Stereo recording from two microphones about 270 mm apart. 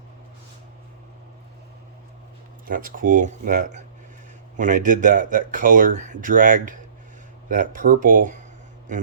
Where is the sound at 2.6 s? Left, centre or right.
Right.